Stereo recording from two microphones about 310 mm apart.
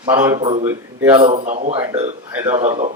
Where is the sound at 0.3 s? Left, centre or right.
Right.